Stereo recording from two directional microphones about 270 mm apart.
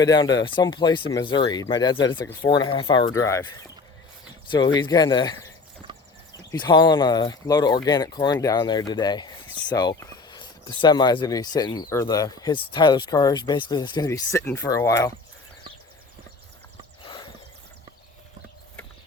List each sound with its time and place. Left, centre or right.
0.0 s speech: centre
5.9 s clip-clop: centre
6.5 s speech: centre
17.0 s horse: centre